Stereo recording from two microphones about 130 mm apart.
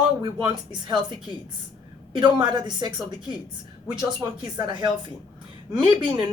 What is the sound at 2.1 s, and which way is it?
A woman's voice, 35° right (ahead or behind).